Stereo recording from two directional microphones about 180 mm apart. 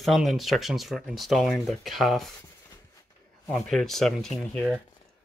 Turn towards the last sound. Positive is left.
turn(degrees=5)  # may be behind; listen again after turning